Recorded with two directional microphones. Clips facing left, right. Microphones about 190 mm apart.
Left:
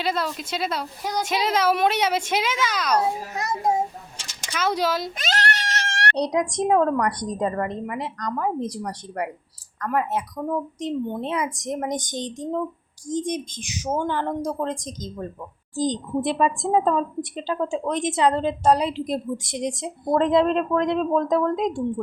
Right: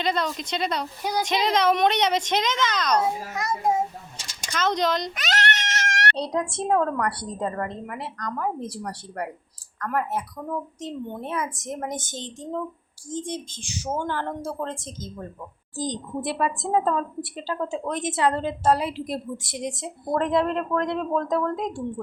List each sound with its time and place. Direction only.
0.0 s a woman's voice: 5° left (ahead or behind)
3.3 s a woman's voice: 20° left (ahead or behind)
4.4 s a woman's voice: 10° left (ahead or behind)
5.1 s goat: 30° left (ahead or behind)
6.1 s a woman's voice: 15° left (ahead or behind)